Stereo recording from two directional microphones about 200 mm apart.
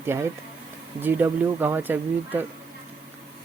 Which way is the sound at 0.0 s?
10° right (ahead or behind).